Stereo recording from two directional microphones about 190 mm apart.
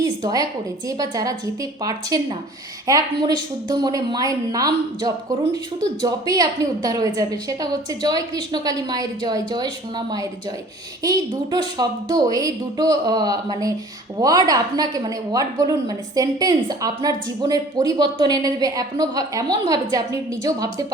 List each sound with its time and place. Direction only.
0.0 s a woman's voice: 20° right (ahead or behind)